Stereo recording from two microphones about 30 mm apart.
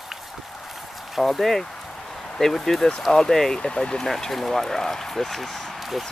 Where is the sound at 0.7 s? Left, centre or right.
Centre.